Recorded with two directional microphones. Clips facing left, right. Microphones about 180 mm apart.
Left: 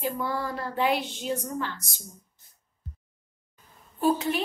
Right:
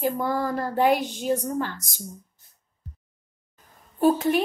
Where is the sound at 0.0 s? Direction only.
45° right (ahead or behind).